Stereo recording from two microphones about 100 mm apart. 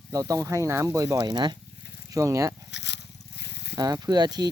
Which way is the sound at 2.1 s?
30° right (ahead or behind).